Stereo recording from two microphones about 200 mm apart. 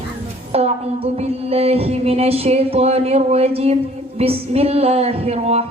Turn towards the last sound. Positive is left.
turn(degrees=-30)  # may be behind; listen again after turning